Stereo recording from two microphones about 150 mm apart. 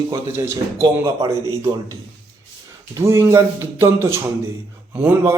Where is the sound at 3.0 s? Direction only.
20° right (ahead or behind).